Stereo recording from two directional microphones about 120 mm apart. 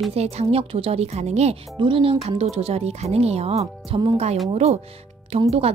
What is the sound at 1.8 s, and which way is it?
A woman's voice, 45° right (ahead or behind).